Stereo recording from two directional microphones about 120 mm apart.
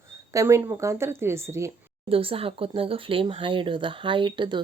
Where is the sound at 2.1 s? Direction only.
50° right (ahead or behind).